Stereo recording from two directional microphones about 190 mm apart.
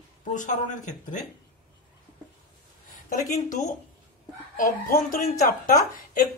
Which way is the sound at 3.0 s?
45° left (ahead or behind).